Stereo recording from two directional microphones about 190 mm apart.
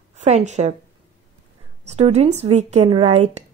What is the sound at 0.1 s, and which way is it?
Speech, 35° right (ahead or behind).